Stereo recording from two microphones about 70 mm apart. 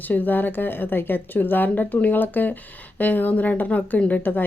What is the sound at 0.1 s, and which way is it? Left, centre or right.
A woman's voice, left.